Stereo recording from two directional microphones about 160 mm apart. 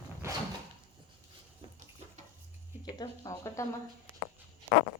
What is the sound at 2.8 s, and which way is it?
Speech, 25° left (ahead or behind).